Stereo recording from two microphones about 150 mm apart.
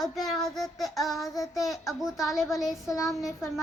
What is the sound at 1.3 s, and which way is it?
Child singing, 20° left (ahead or behind).